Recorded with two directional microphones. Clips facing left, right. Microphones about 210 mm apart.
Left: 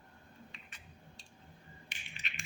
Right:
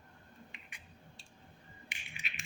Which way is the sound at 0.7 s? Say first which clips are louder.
Even; 15° right (ahead or behind).